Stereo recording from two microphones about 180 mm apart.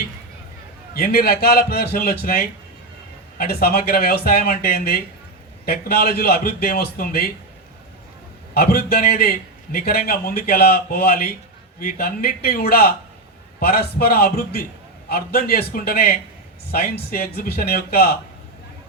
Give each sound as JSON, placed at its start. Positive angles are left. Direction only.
{"t": 0.9, "sound": "speech", "side_deg": 60}
{"t": 8.5, "sound": "speech", "side_deg": 60}